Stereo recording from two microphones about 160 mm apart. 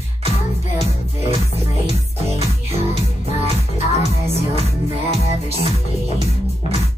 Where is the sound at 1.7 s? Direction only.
40° left (ahead or behind).